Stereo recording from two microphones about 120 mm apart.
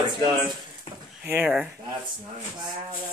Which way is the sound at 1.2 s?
15° right (ahead or behind).